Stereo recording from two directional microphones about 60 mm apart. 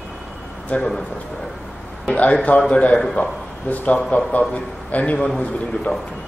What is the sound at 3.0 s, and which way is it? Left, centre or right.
Speech, centre.